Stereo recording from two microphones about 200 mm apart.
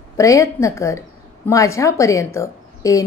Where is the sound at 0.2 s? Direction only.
15° left (ahead or behind).